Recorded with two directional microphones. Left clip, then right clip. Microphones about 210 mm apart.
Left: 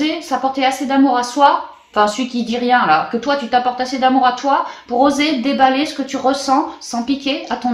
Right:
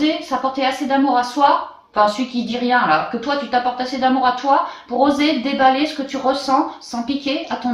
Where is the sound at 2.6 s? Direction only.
40° left (ahead or behind).